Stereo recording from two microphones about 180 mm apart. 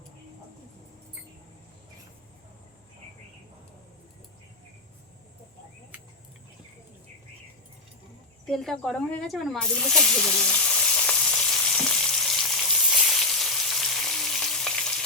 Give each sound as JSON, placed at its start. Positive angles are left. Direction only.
{"t": 5.9, "sound": "a sound", "side_deg": -10}
{"t": 8.4, "sound": "speech", "side_deg": 0}
{"t": 10.9, "sound": "frying", "side_deg": 5}